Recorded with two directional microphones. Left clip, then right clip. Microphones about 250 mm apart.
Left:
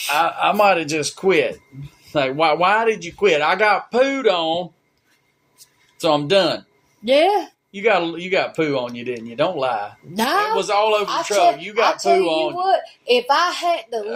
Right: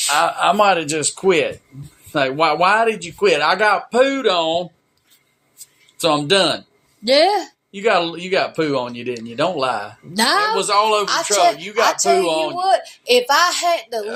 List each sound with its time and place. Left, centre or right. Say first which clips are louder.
0.1 s speech: right 1 dB; right
6.0 s speech: right 1 dB; right